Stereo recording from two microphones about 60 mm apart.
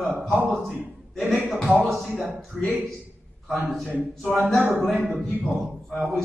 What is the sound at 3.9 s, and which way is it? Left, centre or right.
A capella, right.